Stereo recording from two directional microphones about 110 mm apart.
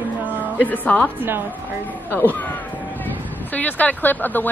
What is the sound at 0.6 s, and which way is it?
Speech, 15° left (ahead or behind).